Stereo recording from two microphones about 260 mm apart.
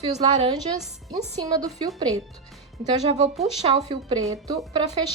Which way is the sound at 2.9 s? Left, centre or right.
Right.